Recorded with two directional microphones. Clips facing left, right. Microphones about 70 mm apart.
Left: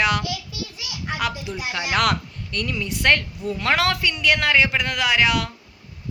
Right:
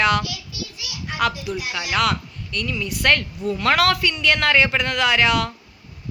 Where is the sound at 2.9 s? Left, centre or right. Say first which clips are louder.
Even; left.